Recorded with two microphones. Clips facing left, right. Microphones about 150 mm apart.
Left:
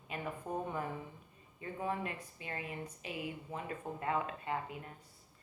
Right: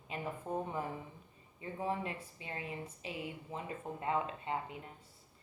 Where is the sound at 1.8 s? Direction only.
30° right (ahead or behind).